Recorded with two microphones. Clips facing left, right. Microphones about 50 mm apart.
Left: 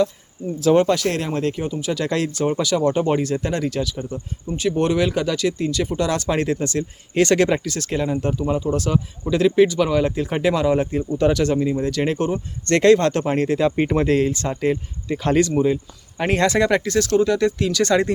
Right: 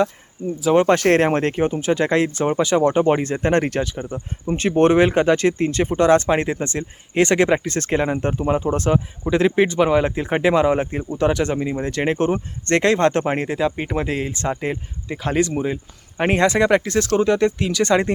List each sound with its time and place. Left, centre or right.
0.6 s speech: centre
0.9 s speech: right
3.5 s speech: right
4.4 s speech: right; by 7.7 s centre
7.7 s speech: right
13.5 s speech: centre; by 18.1 s right